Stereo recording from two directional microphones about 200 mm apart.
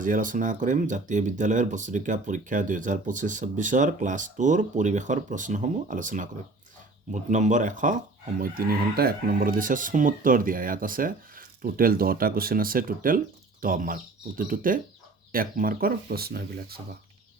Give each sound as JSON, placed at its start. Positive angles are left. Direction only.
{"t": 0.0, "sound": "speech", "side_deg": -40}